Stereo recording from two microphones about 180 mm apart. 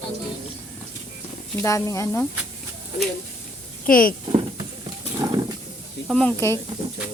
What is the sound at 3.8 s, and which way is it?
Speech, 50° left (ahead or behind).